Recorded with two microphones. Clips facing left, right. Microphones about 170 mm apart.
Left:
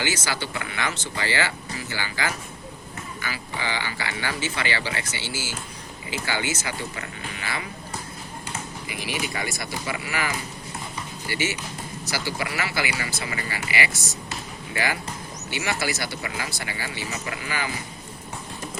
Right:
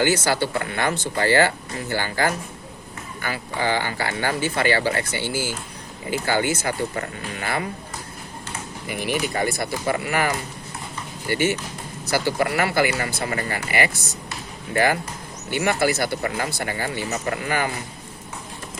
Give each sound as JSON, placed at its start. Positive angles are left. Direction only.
{"t": 0.0, "sound": "speech", "side_deg": -55}
{"t": 8.9, "sound": "speech", "side_deg": -50}